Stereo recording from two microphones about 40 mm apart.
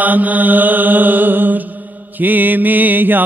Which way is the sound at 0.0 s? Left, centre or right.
Right.